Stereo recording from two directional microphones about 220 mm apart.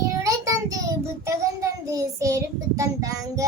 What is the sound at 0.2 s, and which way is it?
Child singing, 15° right (ahead or behind).